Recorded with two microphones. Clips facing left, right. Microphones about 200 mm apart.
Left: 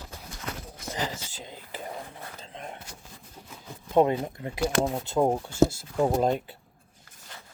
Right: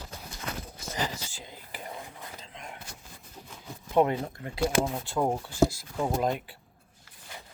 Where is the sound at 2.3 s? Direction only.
35° left (ahead or behind).